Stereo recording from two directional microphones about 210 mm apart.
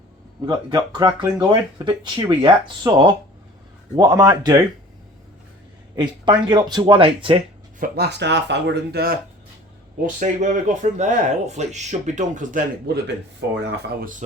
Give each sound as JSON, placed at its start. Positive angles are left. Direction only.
{"t": 0.4, "sound": "speech", "side_deg": -20}
{"t": 6.0, "sound": "speech", "side_deg": -20}
{"t": 7.8, "sound": "speech", "side_deg": -50}
{"t": 10.2, "sound": "speech", "side_deg": -35}